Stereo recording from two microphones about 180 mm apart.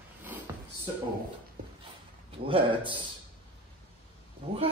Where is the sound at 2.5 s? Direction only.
30° right (ahead or behind).